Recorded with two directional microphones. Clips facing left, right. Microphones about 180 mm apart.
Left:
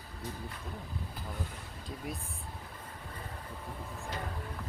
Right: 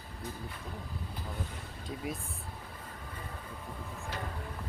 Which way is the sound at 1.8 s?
Centre (ahead or behind).